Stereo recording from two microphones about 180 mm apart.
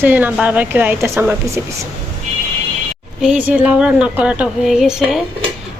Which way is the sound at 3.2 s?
5° right (ahead or behind).